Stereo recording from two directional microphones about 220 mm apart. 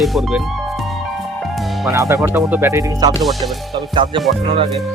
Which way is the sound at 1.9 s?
15° right (ahead or behind).